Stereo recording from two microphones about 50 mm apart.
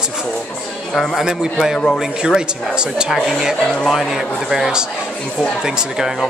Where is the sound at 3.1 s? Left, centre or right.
Centre.